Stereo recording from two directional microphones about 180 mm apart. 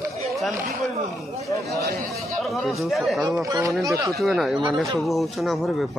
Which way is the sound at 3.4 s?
20° right (ahead or behind).